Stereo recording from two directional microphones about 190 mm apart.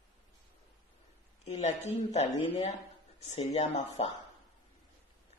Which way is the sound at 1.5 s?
35° left (ahead or behind).